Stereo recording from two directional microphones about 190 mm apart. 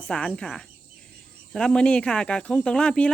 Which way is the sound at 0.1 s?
5° left (ahead or behind).